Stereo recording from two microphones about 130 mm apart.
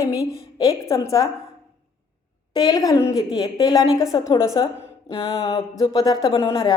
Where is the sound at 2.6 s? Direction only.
30° left (ahead or behind).